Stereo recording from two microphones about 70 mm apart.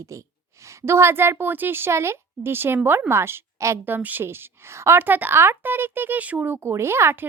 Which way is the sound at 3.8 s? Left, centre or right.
Right.